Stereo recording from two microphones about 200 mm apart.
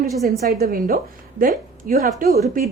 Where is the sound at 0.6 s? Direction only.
45° right (ahead or behind).